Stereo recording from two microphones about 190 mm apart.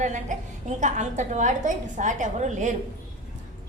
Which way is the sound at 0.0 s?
40° right (ahead or behind).